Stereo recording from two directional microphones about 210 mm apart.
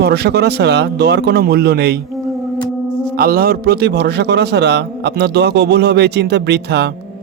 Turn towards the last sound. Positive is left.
turn(degrees=-50)  # may be behind; listen again after turning